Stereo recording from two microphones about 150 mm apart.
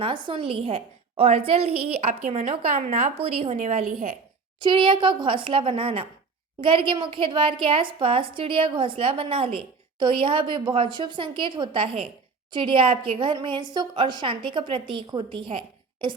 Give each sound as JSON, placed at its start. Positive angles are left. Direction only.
{"t": 0.0, "sound": "a woman's voice", "side_deg": -35}
{"t": 4.6, "sound": "a woman's voice", "side_deg": -35}